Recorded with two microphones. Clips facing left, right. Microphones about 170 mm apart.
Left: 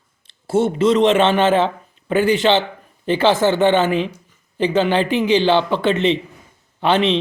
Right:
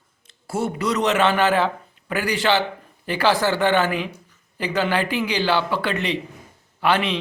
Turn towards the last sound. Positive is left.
turn(degrees=25)  # may be behind; listen again after turning